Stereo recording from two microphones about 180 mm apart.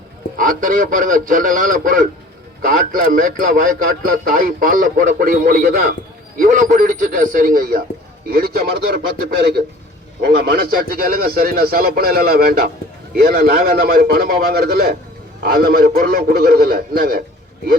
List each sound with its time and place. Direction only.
0.3 s a man's voice: 50° right (ahead or behind)